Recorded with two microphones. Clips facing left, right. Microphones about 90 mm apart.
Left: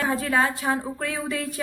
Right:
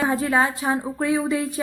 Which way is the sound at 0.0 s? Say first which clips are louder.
Right 2 dB; 25° right (ahead or behind).